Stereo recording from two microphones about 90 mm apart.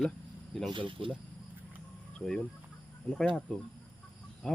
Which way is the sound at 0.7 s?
65° right (ahead or behind).